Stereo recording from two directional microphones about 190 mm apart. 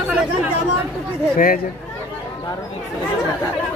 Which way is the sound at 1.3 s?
45° left (ahead or behind).